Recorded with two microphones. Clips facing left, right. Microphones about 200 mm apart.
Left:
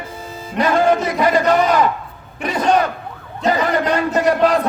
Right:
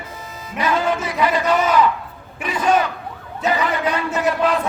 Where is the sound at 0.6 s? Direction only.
45° left (ahead or behind).